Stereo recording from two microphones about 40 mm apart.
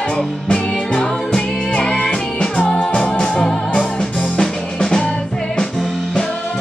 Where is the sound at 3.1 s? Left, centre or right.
Centre.